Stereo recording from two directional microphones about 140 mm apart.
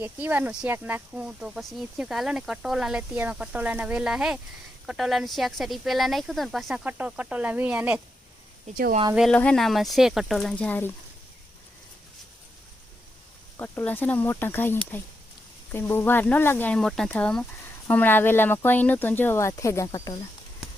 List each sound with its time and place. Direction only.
0.0 s speech: 15° right (ahead or behind)
8.6 s speech: 70° right (ahead or behind)
9.3 s speech: 10° left (ahead or behind)
13.6 s speech: 15° left (ahead or behind)